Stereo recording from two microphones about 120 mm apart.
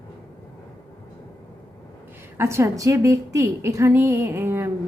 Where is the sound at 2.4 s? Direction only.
25° right (ahead or behind).